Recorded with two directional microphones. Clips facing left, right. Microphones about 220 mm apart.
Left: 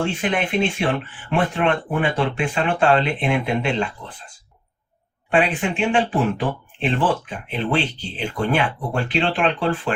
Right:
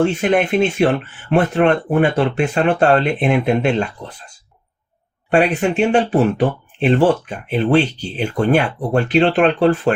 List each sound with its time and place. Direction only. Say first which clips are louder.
0.0 s speech: right 7 dB; 45° right (ahead or behind)
5.3 s speech: right 5 dB; 40° right (ahead or behind)
7.3 s speech: right 7 dB; 45° right (ahead or behind)